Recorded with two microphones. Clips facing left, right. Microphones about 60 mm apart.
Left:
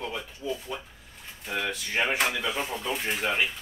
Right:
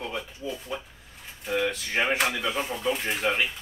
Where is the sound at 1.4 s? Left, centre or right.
Centre.